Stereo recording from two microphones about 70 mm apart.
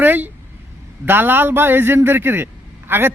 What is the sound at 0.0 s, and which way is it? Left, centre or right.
A man's voice, right.